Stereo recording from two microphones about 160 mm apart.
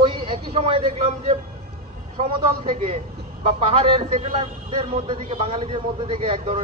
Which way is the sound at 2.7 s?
50° right (ahead or behind).